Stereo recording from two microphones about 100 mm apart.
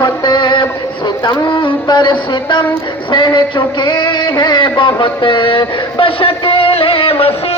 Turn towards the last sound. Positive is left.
turn(degrees=70)  # may be behind; listen again after turning